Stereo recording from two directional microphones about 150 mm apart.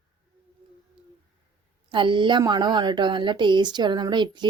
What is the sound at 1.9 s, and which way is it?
A woman's voice, 35° right (ahead or behind).